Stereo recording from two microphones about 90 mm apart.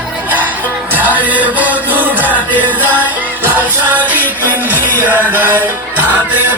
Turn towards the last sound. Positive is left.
turn(degrees=-20)  # may be behind; listen again after turning